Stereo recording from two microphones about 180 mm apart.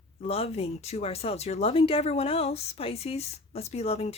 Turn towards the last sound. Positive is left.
turn(degrees=35)  # may be behind; listen again after turning